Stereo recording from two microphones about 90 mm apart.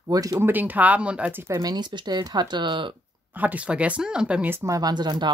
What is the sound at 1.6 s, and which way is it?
Speech, 50° right (ahead or behind).